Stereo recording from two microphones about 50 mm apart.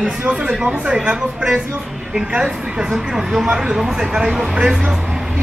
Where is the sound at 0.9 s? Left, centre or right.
Centre.